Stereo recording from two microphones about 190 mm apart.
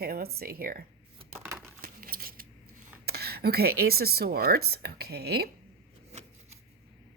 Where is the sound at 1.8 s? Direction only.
50° right (ahead or behind).